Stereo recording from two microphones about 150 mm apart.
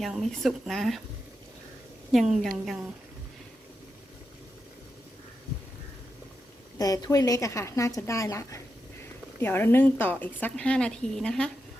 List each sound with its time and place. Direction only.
0.0 s speech: centre (ahead or behind)
2.4 s speech: 5° left (ahead or behind)
6.7 s a woman's voice: 25° left (ahead or behind); by 11.5 s 5° left (ahead or behind)